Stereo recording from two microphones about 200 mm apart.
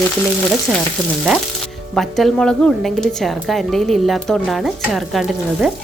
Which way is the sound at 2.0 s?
Centre (ahead or behind).